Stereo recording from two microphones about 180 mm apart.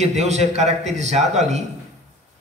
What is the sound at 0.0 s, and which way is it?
A man's voice, 40° right (ahead or behind).